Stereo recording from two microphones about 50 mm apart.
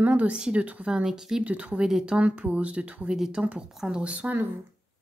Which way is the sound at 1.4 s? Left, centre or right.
Right.